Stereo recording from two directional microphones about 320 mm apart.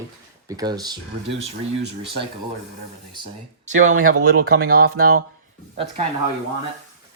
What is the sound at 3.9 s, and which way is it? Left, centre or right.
Speech, right.